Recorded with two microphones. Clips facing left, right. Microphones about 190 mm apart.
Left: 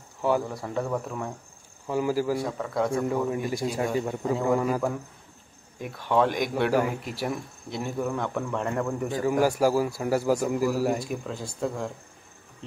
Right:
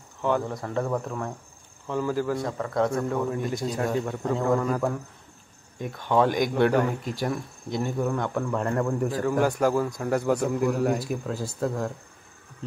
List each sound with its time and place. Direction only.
0.2 s speech: 5° left (ahead or behind)